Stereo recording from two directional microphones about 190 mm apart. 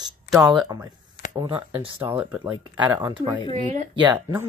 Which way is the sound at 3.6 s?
40° right (ahead or behind).